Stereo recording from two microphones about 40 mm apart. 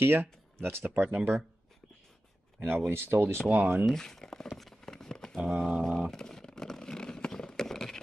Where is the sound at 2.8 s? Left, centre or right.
Right.